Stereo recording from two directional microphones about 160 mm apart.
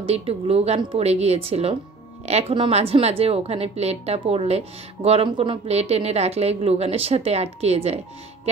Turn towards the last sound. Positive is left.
turn(degrees=-40)  # may be behind; listen again after turning